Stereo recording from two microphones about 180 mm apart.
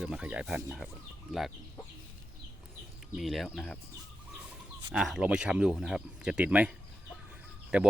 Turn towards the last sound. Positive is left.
turn(degrees=-5)  # may be behind; listen again after turning